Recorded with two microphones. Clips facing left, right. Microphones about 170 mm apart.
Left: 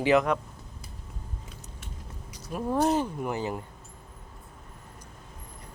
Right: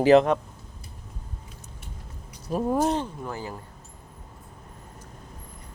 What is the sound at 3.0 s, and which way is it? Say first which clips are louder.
Speech: left 4 dB; 15° left (ahead or behind).